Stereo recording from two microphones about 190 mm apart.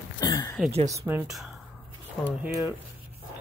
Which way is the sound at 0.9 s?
15° right (ahead or behind).